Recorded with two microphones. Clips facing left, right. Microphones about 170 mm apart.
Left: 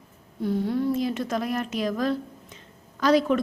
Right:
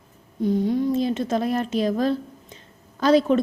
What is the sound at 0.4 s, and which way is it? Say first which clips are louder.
A woman's voice: right 3 dB; 15° right (ahead or behind).